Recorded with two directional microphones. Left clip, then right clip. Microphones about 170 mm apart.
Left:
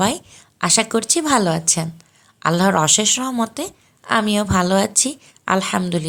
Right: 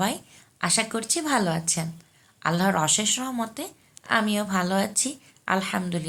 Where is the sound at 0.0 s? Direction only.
65° left (ahead or behind).